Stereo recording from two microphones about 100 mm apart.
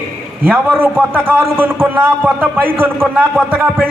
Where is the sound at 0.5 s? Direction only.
20° right (ahead or behind).